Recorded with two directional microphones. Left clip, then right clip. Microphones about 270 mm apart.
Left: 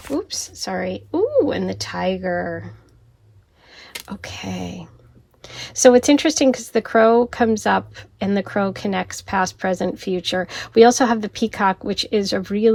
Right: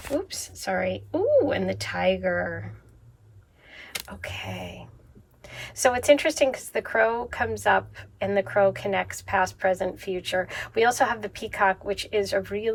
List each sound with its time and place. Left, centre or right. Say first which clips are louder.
0.2 s a woman's voice: left 7 dB; centre
4.1 s speech: left 7 dB; centre